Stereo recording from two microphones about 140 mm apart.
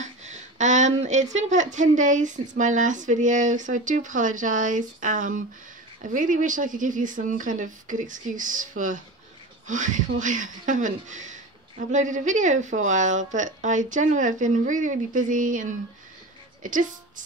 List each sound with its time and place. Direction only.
0.0 s a woman's voice: 55° right (ahead or behind)